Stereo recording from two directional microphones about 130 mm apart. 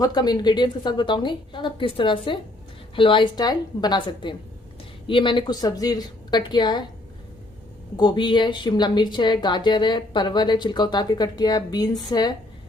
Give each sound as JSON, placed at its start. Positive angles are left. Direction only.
{"t": 0.0, "sound": "a woman's voice", "side_deg": 30}
{"t": 7.9, "sound": "a woman's voice", "side_deg": 35}